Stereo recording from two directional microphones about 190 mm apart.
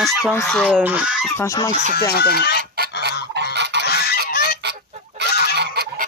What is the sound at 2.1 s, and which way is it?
Speech, 55° left (ahead or behind).